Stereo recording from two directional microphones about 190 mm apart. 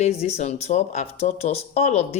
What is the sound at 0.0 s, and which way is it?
Speech, 35° left (ahead or behind).